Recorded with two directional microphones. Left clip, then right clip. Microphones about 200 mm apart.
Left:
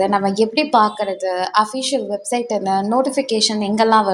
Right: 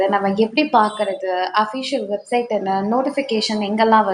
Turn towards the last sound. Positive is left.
turn(degrees=35)  # may be behind; listen again after turning